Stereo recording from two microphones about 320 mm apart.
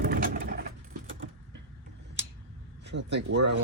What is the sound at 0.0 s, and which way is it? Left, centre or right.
Sewing machine, right.